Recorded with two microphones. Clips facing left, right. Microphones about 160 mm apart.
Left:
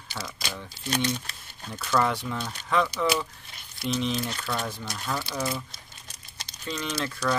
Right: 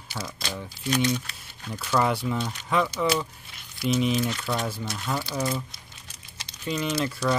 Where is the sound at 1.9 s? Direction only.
5° right (ahead or behind).